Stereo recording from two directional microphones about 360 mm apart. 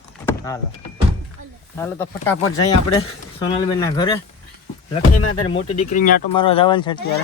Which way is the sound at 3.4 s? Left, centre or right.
Centre.